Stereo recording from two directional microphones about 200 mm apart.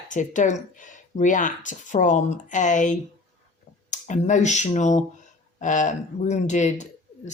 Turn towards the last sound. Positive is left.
turn(degrees=35)  # may be behind; listen again after turning